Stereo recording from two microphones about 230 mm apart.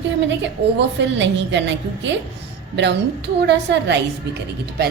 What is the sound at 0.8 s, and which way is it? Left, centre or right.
A woman's voice, right.